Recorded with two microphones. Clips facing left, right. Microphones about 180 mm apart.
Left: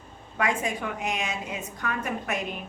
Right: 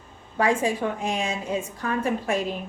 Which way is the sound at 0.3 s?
30° right (ahead or behind).